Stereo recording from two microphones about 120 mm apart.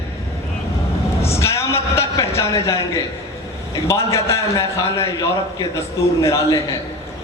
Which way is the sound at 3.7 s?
25° left (ahead or behind).